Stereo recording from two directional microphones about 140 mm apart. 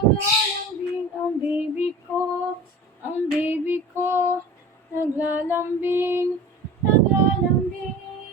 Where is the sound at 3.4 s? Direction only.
15° right (ahead or behind).